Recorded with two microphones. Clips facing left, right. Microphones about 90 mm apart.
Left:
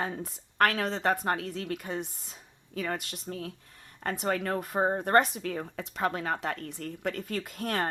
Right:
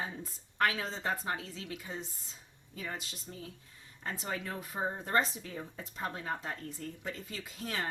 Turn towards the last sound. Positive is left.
turn(degrees=55)  # may be behind; listen again after turning